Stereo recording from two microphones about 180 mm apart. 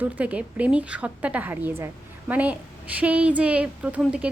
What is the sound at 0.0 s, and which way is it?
A woman's voice, 10° right (ahead or behind).